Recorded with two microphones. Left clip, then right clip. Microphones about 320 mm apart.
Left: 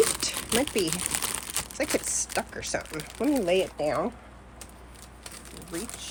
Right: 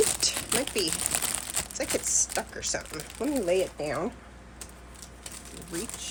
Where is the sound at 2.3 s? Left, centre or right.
Left.